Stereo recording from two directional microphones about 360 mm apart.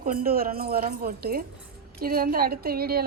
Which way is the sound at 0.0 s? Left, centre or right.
Right.